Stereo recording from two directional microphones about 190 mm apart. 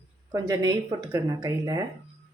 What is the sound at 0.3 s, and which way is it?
Speech, 20° right (ahead or behind).